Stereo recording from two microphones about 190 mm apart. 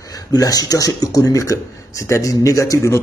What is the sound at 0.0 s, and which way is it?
Speech, 20° left (ahead or behind).